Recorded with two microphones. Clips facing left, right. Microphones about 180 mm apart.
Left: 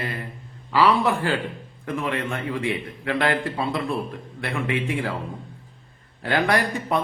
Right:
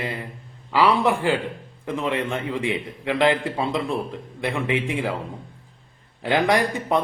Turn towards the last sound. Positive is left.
turn(degrees=-20)  # may be behind; listen again after turning